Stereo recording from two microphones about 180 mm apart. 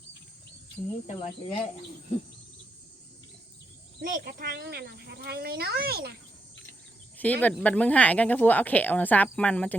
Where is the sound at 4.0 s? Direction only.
55° right (ahead or behind).